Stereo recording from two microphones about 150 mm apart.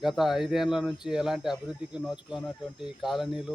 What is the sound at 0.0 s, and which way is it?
Speech, centre (ahead or behind).